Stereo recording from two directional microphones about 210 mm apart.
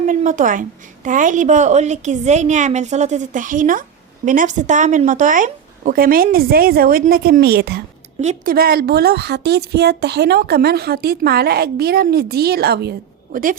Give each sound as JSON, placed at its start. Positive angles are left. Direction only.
{"t": 0.0, "sound": "a woman's voice", "side_deg": -35}
{"t": 8.2, "sound": "a woman's voice", "side_deg": -35}
{"t": 8.5, "sound": "a woman's voice", "side_deg": -45}